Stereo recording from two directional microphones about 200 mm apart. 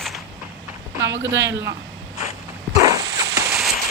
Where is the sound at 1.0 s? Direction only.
65° right (ahead or behind).